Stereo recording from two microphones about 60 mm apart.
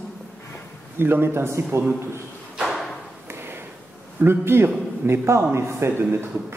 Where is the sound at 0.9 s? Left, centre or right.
Right.